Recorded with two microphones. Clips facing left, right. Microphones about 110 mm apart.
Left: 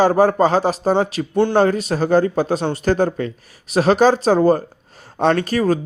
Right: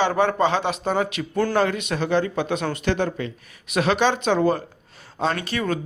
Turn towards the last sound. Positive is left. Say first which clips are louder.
# left 8 dB
turn(degrees=40)  # may be behind; listen again after turning